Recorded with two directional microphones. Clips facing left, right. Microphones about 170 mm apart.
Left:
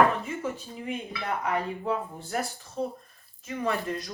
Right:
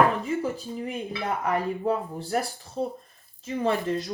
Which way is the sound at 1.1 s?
40° right (ahead or behind).